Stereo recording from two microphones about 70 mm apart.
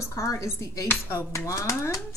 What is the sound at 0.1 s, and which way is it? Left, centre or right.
A woman's voice, left.